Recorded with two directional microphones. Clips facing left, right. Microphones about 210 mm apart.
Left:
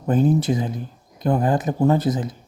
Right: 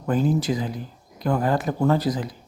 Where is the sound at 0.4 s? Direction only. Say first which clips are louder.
Left 3 dB; 25° left (ahead or behind).